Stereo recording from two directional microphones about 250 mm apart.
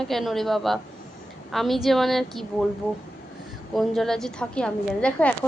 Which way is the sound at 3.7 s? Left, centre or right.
Centre.